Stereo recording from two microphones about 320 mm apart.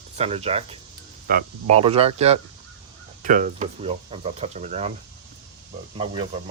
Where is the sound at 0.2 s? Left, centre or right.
Centre.